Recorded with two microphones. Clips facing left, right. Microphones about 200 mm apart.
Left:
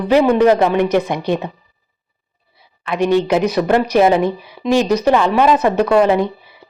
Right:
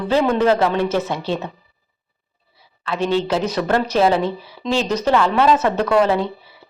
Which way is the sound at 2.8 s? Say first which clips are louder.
Left 5 dB; 15° left (ahead or behind).